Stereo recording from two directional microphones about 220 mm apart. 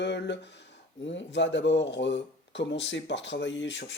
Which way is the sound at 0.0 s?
50° left (ahead or behind).